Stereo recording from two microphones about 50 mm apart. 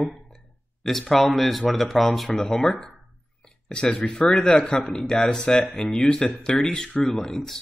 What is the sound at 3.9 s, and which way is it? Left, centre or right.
Speech, centre.